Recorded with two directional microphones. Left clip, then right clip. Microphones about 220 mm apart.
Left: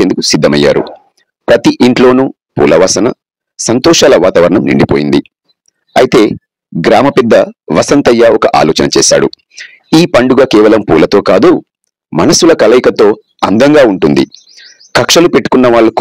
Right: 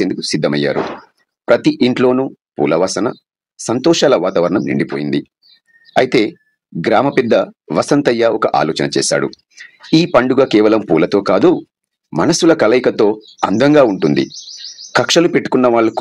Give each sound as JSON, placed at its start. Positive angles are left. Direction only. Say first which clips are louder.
{"t": 0.0, "sound": "speech", "louder": "left 8 dB", "side_deg": 40}